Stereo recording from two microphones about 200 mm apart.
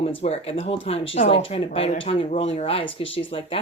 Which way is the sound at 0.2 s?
30° left (ahead or behind).